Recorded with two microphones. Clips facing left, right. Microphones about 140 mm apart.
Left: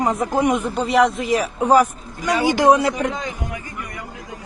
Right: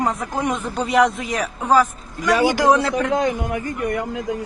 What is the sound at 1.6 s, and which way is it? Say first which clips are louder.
A man's voice: left 1 dB; 15° left (ahead or behind).